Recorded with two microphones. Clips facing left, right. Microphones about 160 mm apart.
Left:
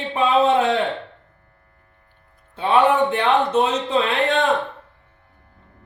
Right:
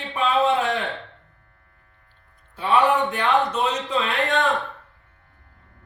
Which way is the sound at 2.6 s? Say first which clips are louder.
Left 3 dB; 25° left (ahead or behind).